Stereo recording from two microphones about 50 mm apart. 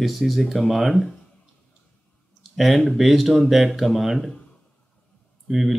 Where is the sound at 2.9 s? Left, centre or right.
Centre.